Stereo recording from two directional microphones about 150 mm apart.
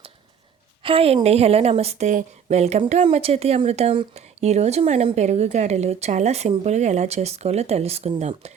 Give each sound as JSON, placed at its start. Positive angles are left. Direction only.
{"t": 0.8, "sound": "speech", "side_deg": -40}